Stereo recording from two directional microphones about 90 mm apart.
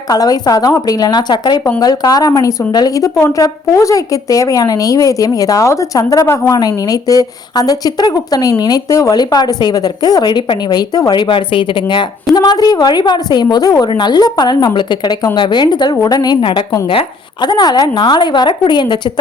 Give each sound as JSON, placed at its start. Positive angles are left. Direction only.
{"t": 0.1, "sound": "a woman's voice", "side_deg": 45}
{"t": 6.2, "sound": "a woman's voice", "side_deg": 25}
{"t": 6.5, "sound": "a woman's voice", "side_deg": 45}
{"t": 16.4, "sound": "a woman's voice", "side_deg": 65}
{"t": 16.8, "sound": "speech", "side_deg": 90}
{"t": 17.4, "sound": "a woman's voice", "side_deg": 50}